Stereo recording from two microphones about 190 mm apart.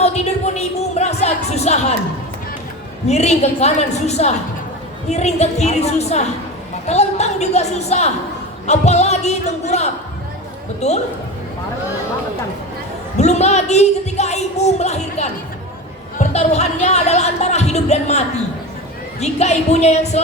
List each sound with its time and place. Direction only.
0.0 s a woman's voice: 35° left (ahead or behind)
3.1 s a woman's voice: 35° left (ahead or behind)
13.1 s a woman's voice: 35° left (ahead or behind)